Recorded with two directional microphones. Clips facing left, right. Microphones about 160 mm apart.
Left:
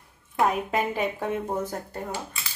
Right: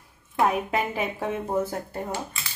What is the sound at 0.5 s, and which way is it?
Dishes, 5° right (ahead or behind).